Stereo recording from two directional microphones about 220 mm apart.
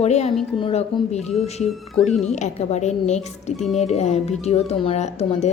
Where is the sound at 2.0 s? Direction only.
Centre (ahead or behind).